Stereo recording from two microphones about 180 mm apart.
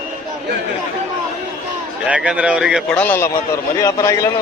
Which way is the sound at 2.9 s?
10° left (ahead or behind).